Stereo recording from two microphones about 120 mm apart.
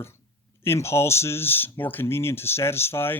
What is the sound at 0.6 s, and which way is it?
A man's voice, 20° left (ahead or behind).